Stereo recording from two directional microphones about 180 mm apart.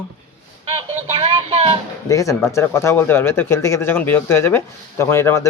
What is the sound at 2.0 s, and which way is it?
Speech, 15° left (ahead or behind).